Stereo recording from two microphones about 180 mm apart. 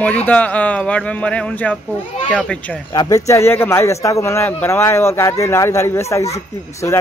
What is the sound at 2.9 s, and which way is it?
A man's voice, 20° left (ahead or behind).